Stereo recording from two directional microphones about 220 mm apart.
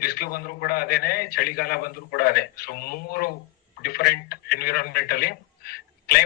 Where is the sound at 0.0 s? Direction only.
45° left (ahead or behind).